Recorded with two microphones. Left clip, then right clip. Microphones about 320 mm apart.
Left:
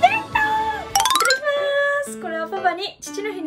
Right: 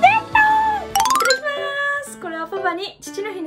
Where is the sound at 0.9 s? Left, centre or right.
Centre.